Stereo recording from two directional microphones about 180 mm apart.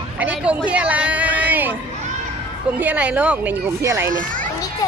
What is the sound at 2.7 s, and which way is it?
Speech, 10° right (ahead or behind).